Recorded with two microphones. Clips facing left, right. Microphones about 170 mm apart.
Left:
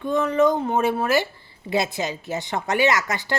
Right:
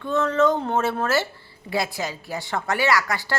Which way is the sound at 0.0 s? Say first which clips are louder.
Left 1 dB; 15° left (ahead or behind).